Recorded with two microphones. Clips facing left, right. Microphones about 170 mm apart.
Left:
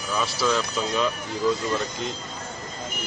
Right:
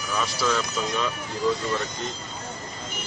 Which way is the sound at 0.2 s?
Centre (ahead or behind).